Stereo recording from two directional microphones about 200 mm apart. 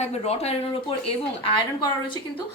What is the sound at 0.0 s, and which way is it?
Speech, 30° left (ahead or behind).